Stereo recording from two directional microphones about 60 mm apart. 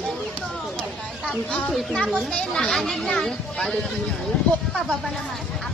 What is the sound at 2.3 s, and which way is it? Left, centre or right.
Speech, centre.